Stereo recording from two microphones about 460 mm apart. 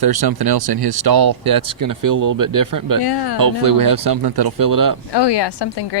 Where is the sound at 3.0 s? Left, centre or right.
Left.